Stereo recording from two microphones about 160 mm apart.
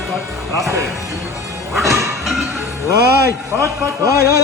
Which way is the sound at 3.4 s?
15° right (ahead or behind).